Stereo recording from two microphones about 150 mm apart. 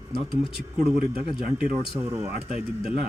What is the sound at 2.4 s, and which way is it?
Speech, 5° right (ahead or behind).